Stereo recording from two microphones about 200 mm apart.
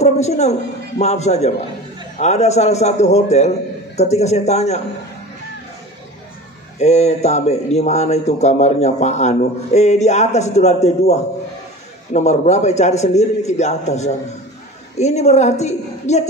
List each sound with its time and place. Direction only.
0.0 s speech: 35° left (ahead or behind)
6.8 s speech: 35° left (ahead or behind)